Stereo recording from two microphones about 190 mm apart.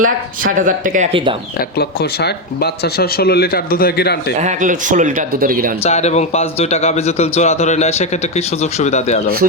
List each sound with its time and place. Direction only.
0.0 s speech: 45° right (ahead or behind)
1.1 s speech: 30° right (ahead or behind)
1.5 s speech: 55° left (ahead or behind)
4.4 s speech: 40° right (ahead or behind)
5.8 s speech: 35° left (ahead or behind)